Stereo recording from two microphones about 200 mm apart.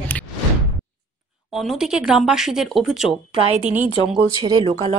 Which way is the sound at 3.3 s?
30° right (ahead or behind).